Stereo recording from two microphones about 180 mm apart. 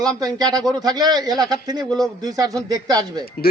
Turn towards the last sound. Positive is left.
turn(degrees=-20)  # may be behind; listen again after turning